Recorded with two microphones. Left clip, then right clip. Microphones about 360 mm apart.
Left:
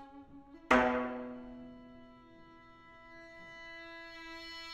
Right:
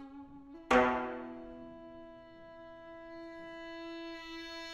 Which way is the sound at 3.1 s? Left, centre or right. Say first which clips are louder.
Right 3 dB; right.